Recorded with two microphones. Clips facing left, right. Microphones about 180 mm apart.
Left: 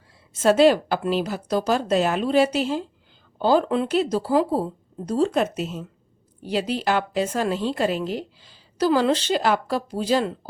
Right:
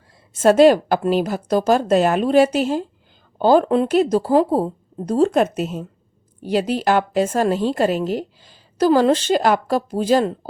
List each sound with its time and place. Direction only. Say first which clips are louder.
0.4 s a woman's voice: right 4 dB; 45° right (ahead or behind)